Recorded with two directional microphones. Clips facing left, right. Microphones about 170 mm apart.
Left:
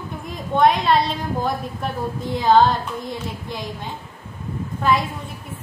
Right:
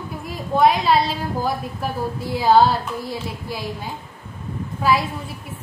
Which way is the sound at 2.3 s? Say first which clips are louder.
Even; 10° right (ahead or behind).